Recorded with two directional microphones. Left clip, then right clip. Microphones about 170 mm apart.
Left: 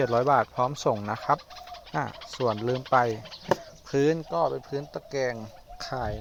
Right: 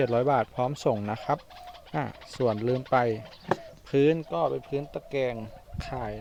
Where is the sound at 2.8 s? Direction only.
30° right (ahead or behind).